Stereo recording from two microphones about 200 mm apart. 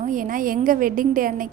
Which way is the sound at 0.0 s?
40° right (ahead or behind).